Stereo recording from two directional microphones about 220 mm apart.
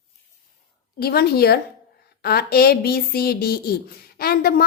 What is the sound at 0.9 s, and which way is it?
Speech, 45° left (ahead or behind).